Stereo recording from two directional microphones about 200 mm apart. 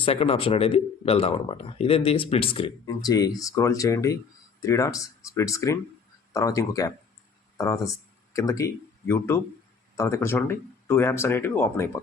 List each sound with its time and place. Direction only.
0.0 s speech: 30° left (ahead or behind)
8.3 s speech: 15° left (ahead or behind)